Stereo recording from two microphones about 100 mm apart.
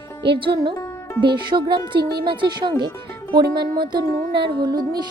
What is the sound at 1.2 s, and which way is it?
Music, 50° right (ahead or behind).